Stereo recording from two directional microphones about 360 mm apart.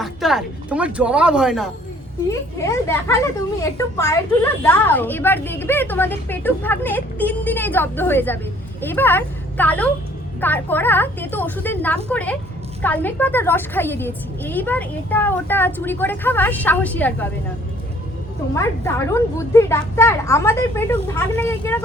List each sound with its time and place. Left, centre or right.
0.0 s a woman's voice: centre
18.5 s a woman's voice: centre